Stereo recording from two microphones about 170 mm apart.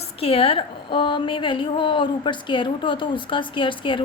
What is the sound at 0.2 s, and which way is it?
Speech, 35° left (ahead or behind).